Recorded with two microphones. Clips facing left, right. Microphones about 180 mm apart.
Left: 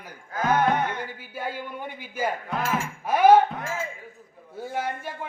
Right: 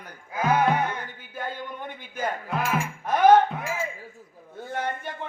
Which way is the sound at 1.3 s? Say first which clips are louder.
Left 1 dB; 10° left (ahead or behind).